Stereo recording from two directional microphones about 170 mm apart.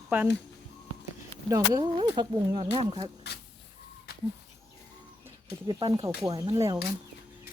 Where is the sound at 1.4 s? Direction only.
15° right (ahead or behind).